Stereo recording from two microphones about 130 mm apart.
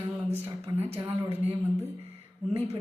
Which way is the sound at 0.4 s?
20° right (ahead or behind).